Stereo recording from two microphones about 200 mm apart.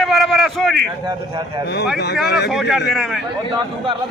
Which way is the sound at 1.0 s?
20° right (ahead or behind).